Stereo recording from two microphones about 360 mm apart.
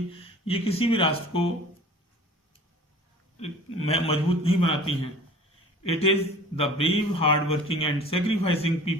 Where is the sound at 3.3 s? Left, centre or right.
Centre.